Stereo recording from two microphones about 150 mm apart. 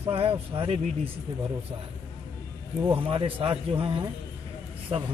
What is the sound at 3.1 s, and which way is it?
Speech, 35° right (ahead or behind).